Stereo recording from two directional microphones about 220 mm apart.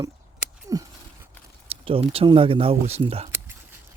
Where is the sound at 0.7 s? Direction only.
15° right (ahead or behind).